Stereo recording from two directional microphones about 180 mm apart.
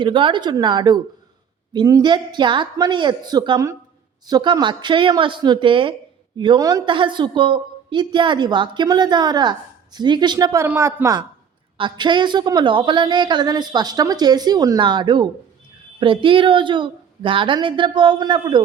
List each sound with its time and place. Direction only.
0.0 s a woman's voice: 25° right (ahead or behind)